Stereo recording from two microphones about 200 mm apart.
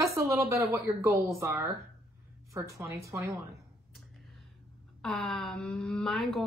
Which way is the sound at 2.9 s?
15° right (ahead or behind).